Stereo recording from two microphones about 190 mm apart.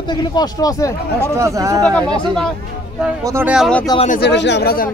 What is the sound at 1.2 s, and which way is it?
Speech, 15° right (ahead or behind).